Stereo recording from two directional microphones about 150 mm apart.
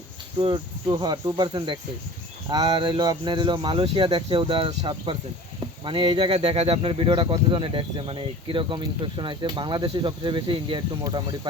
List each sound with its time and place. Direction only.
0.3 s speech: 35° right (ahead or behind)